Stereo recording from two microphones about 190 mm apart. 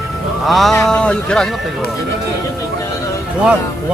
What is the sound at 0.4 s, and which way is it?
Speech, centre (ahead or behind).